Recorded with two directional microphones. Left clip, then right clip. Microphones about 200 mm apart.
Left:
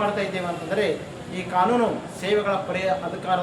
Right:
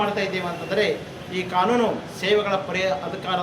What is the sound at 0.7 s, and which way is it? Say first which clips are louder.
A man's voice: right 2 dB; 15° right (ahead or behind).